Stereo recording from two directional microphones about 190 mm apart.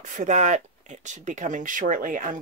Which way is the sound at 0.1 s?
40° right (ahead or behind).